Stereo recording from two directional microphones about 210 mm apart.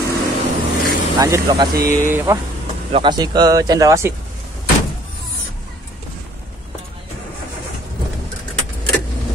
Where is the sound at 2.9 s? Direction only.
20° right (ahead or behind).